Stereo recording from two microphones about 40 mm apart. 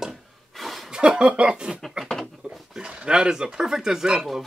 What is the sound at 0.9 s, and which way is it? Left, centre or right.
Speech, right.